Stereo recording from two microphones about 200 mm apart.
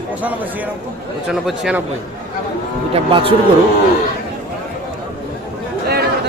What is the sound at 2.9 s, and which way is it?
Speech, 25° right (ahead or behind).